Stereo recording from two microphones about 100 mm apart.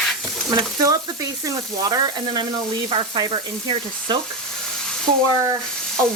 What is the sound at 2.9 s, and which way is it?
Sizzle, 60° right (ahead or behind).